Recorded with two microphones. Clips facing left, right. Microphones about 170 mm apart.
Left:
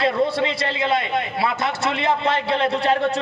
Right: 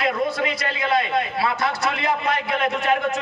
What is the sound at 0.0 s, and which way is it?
A man's voice, 30° left (ahead or behind).